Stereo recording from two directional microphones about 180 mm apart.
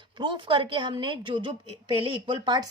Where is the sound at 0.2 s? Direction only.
25° right (ahead or behind).